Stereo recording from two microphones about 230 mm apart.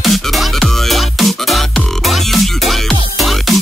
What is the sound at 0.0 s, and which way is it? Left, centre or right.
Music, centre.